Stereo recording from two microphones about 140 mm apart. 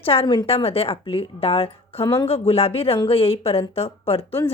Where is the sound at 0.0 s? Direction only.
40° left (ahead or behind).